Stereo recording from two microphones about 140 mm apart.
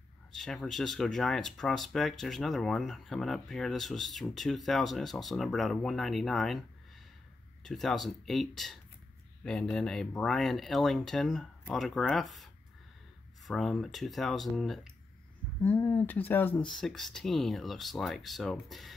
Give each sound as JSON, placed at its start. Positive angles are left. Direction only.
{"t": 0.3, "sound": "speech", "side_deg": 0}
{"t": 7.6, "sound": "speech", "side_deg": 0}
{"t": 13.5, "sound": "speech", "side_deg": 0}
{"t": 15.6, "sound": "speech", "side_deg": 15}
{"t": 16.8, "sound": "speech", "side_deg": 0}